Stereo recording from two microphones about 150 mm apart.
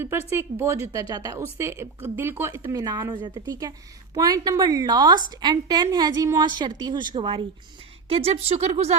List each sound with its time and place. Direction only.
0.0 s a woman's voice: 15° right (ahead or behind); by 9.0 s 45° right (ahead or behind)